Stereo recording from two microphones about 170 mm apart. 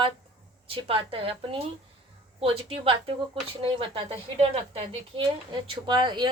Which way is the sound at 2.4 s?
35° right (ahead or behind).